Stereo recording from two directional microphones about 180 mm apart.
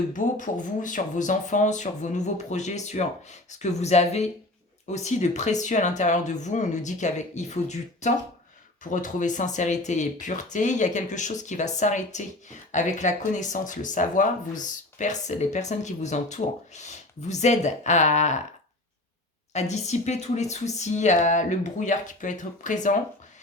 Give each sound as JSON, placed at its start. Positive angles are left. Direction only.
{"t": 0.1, "sound": "speech", "side_deg": 45}
{"t": 19.5, "sound": "speech", "side_deg": 40}